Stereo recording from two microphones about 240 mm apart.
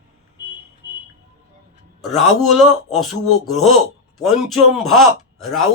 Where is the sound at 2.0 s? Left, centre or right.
Centre.